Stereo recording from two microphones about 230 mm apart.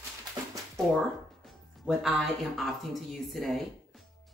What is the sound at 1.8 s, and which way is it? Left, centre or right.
Speech, centre.